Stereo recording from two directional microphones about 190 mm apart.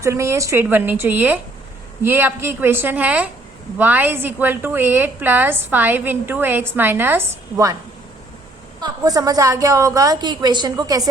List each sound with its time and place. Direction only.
0.0 s a woman's voice: 15° right (ahead or behind)
8.8 s a woman's voice: 20° right (ahead or behind)